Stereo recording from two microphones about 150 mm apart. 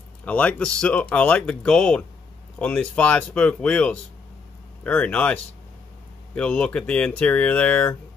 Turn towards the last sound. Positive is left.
turn(degrees=10)  # may be behind; listen again after turning